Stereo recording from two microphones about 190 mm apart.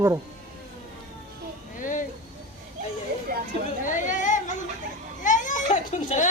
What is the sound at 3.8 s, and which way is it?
Chatter, 40° left (ahead or behind).